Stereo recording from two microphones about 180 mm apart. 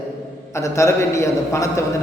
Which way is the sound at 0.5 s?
15° left (ahead or behind).